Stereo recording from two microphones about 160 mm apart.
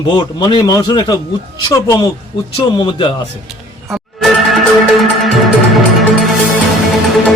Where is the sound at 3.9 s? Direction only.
Centre (ahead or behind).